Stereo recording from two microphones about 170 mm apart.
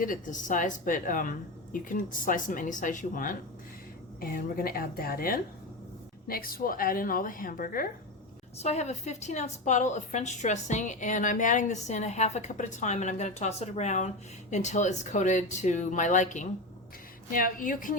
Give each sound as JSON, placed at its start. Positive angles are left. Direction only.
{"t": 0.0, "sound": "a woman's voice", "side_deg": 50}
{"t": 8.5, "sound": "a woman's voice", "side_deg": 40}